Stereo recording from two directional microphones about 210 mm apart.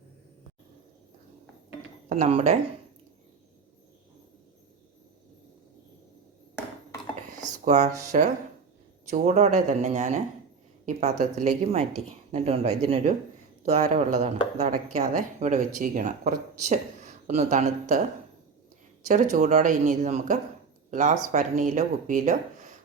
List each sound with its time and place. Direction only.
2.0 s speech: 35° right (ahead or behind)
7.6 s speech: 35° right (ahead or behind)
19.0 s speech: 35° right (ahead or behind)